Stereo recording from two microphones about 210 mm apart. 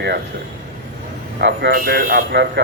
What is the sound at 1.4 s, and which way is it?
Speech, 50° right (ahead or behind).